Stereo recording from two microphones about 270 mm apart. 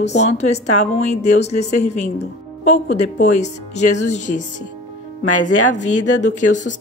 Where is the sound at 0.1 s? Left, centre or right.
Left.